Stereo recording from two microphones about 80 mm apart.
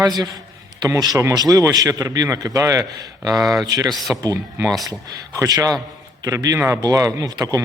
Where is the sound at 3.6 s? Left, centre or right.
Right.